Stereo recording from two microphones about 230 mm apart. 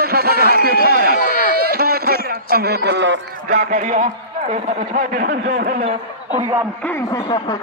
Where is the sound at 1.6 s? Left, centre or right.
Right.